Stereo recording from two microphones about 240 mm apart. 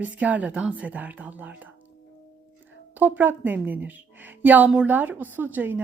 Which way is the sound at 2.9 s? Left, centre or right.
Centre.